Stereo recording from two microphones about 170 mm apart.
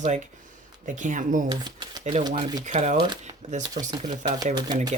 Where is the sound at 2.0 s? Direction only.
40° right (ahead or behind).